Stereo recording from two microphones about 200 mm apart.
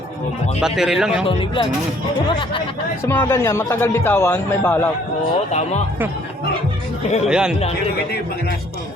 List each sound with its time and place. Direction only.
0.6 s speech: centre (ahead or behind)
1.3 s speech: 25° left (ahead or behind)
3.1 s a man's voice: 10° left (ahead or behind)
5.5 s speech: 35° left (ahead or behind)
7.3 s speech: 5° right (ahead or behind)